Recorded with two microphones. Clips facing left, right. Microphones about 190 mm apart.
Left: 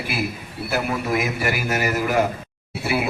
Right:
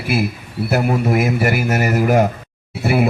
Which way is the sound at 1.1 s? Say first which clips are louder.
Right 6 dB; 50° right (ahead or behind).